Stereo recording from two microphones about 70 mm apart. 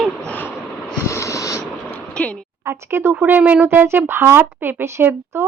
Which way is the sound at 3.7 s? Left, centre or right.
Right.